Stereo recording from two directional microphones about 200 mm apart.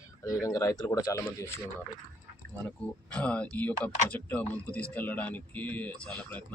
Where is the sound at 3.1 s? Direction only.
5° left (ahead or behind).